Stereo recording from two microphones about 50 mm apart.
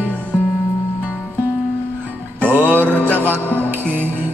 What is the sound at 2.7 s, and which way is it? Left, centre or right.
Music, left.